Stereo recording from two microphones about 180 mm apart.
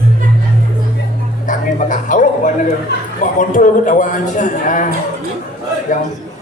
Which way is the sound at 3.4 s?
45° left (ahead or behind).